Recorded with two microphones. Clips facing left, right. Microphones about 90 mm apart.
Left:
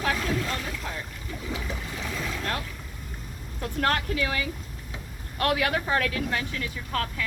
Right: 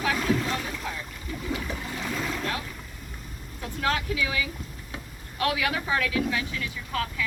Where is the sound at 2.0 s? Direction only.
Centre (ahead or behind).